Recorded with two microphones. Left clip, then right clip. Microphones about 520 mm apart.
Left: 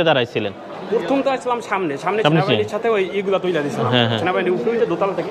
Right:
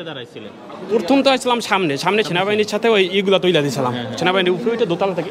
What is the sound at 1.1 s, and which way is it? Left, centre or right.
A man's voice, right.